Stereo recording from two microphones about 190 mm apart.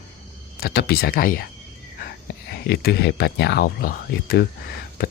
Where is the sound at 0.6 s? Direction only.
55° left (ahead or behind).